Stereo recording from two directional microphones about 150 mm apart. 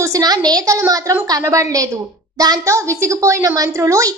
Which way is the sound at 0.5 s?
20° right (ahead or behind).